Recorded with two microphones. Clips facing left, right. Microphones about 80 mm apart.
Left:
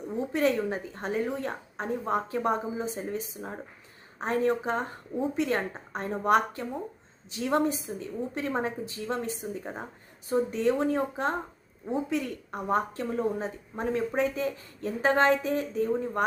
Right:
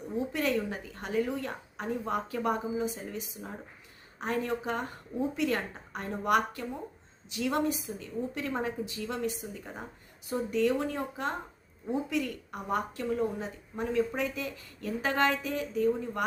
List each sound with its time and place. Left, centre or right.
0.3 s a woman's voice: left